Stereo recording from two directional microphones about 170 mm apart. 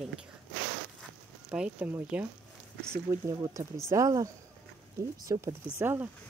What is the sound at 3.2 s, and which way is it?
Speech, 20° right (ahead or behind).